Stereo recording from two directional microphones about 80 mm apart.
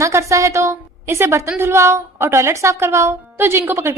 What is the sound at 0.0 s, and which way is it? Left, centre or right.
A woman's voice, right.